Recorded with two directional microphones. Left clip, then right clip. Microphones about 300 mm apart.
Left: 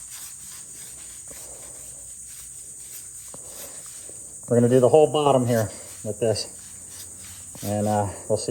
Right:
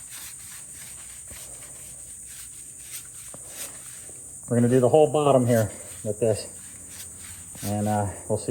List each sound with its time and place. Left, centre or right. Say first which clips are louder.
4.4 s speech: left 3 dB; centre
7.6 s speech: left 3 dB; centre